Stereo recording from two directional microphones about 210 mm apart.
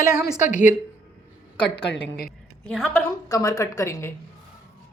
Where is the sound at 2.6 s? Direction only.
5° left (ahead or behind).